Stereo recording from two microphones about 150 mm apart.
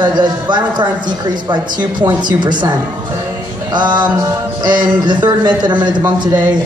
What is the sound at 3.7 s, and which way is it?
A man's voice, 30° right (ahead or behind).